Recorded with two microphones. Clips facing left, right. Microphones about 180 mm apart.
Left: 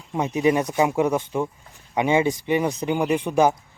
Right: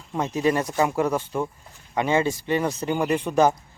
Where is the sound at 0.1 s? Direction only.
15° left (ahead or behind).